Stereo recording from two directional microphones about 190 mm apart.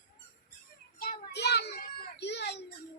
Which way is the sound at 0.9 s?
55° left (ahead or behind).